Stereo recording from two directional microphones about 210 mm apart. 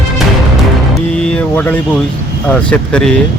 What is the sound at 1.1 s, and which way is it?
Speech, 5° left (ahead or behind).